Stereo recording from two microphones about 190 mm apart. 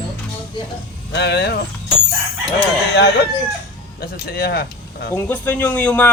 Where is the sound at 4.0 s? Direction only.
55° left (ahead or behind).